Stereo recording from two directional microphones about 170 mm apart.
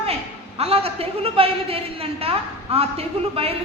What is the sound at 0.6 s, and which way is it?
A woman's voice, 35° right (ahead or behind).